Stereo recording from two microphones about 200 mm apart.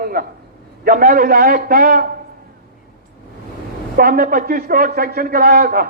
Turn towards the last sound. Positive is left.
turn(degrees=-50)  # may be behind; listen again after turning